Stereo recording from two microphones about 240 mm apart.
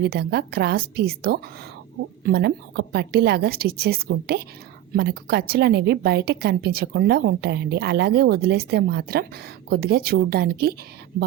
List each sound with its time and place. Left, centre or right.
0.0 s a woman's voice: right